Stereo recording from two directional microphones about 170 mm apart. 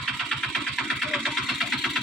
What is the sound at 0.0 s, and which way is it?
Vehicle, centre (ahead or behind).